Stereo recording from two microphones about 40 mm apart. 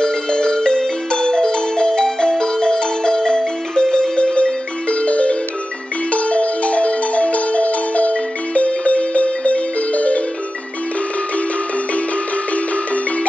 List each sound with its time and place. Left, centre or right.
0.0 s marimba: centre; by 10.2 s left